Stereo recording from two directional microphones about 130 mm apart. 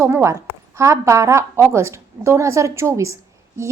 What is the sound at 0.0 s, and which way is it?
A woman's voice, 20° right (ahead or behind).